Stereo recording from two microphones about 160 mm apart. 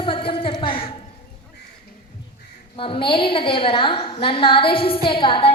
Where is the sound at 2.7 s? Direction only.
35° left (ahead or behind).